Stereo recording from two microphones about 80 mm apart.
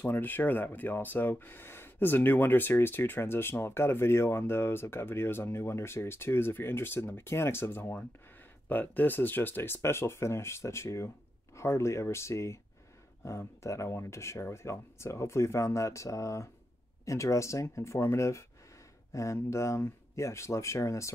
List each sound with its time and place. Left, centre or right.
0.0 s speech: left